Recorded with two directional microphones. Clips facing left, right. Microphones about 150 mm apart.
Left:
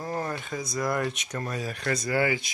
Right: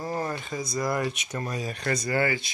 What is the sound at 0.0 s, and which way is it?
Speech, 5° right (ahead or behind).